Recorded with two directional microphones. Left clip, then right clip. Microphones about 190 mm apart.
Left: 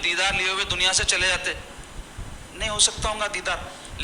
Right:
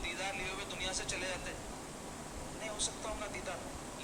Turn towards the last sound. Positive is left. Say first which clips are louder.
# left 15 dB
turn(degrees=45)  # may be behind; listen again after turning